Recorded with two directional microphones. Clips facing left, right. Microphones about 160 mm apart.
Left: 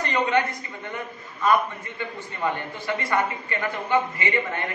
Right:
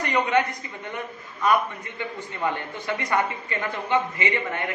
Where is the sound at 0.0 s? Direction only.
15° right (ahead or behind).